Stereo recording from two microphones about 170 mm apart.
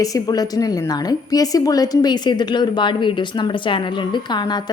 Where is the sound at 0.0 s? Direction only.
20° left (ahead or behind).